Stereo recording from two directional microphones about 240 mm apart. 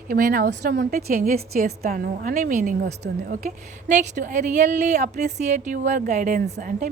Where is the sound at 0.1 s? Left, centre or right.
Right.